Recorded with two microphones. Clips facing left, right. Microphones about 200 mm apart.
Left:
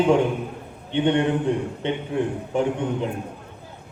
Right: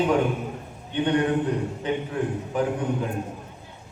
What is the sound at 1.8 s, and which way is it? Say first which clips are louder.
Speech: left 3 dB; 25° left (ahead or behind).